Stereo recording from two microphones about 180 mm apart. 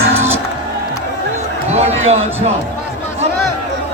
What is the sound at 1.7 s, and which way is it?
Run, 35° right (ahead or behind).